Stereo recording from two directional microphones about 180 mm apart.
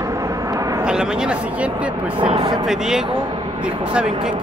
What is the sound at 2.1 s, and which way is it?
Speech, 25° right (ahead or behind).